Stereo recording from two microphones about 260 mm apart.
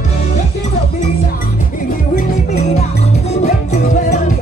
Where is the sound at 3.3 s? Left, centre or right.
Left.